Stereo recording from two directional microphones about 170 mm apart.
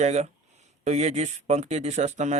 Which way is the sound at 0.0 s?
40° right (ahead or behind).